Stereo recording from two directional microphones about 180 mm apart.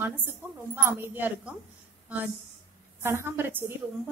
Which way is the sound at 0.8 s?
10° right (ahead or behind).